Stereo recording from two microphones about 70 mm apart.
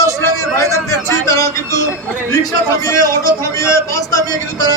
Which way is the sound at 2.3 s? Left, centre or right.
Left.